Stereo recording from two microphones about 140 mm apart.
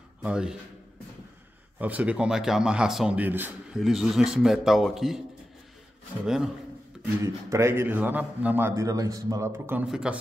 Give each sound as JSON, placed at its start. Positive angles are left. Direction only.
{"t": 0.2, "sound": "a man's voice", "side_deg": -5}
{"t": 1.8, "sound": "a man's voice", "side_deg": -10}
{"t": 3.7, "sound": "a man's voice", "side_deg": 0}
{"t": 6.2, "sound": "a man's voice", "side_deg": -5}
{"t": 7.2, "sound": "a man's voice", "side_deg": -20}
{"t": 9.8, "sound": "a man's voice", "side_deg": -5}